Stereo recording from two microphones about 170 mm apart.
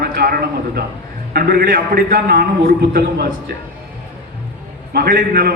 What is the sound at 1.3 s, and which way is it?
A man's voice, 70° right (ahead or behind).